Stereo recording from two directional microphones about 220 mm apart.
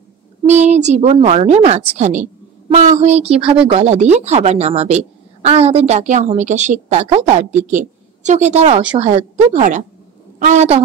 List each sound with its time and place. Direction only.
0.5 s a woman's voice: 30° right (ahead or behind)